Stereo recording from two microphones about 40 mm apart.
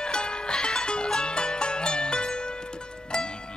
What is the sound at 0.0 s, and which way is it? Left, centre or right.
Music, left.